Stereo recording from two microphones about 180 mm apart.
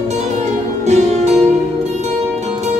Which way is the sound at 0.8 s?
40° right (ahead or behind).